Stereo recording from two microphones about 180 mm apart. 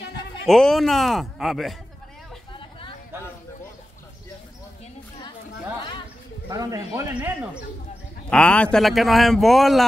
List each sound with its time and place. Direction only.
0.5 s speech: centre (ahead or behind)
6.5 s a man's voice: 20° right (ahead or behind)
8.3 s speech: 5° left (ahead or behind)